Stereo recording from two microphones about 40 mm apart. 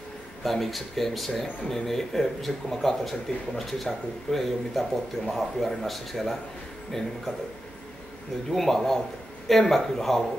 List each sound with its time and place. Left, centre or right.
0.4 s speech: centre
8.5 s speech: centre